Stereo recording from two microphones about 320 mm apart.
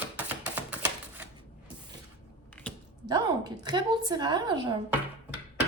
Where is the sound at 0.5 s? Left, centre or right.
Centre.